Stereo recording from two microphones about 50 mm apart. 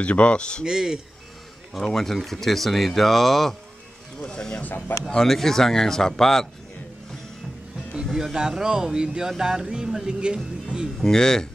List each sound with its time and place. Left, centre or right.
0.0 s a man's voice: left
0.7 s speech: centre
1.7 s speech: centre
4.2 s speech: centre
4.6 s speech: left
5.1 s speech: centre
8.1 s speech: centre
11.0 s speech: centre